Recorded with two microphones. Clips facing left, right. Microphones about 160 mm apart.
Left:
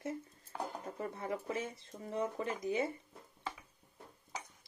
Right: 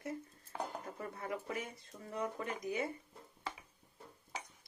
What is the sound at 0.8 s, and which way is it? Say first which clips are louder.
Speech: left 3 dB; 25° left (ahead or behind).